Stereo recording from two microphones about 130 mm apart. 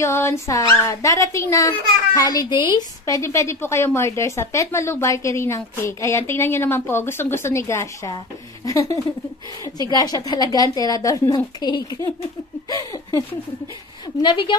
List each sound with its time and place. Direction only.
0.0 s a woman's voice: 20° left (ahead or behind)
3.2 s a woman's voice: 20° left (ahead or behind)
14.2 s a woman's voice: 40° left (ahead or behind)